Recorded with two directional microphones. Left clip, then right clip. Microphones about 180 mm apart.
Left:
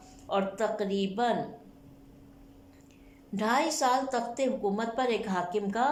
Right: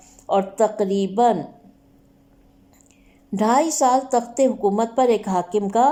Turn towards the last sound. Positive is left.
turn(degrees=-35)  # may be behind; listen again after turning